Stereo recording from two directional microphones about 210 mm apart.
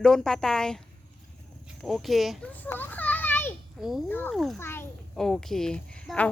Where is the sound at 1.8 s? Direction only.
Centre (ahead or behind).